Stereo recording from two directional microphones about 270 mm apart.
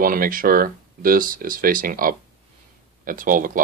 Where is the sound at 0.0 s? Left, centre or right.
Right.